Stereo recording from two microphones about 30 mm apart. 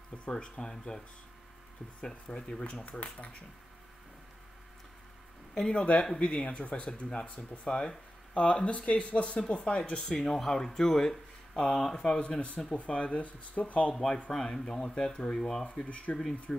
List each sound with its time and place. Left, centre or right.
0.3 s speech: left
2.3 s speech: left
2.8 s speech: left
5.6 s speech: left
10.0 s speech: centre
12.2 s speech: left
13.9 s speech: centre
15.3 s speech: centre
15.6 s speech: left
16.5 s speech: centre